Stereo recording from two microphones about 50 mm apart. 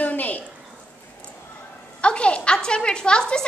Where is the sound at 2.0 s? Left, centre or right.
Left.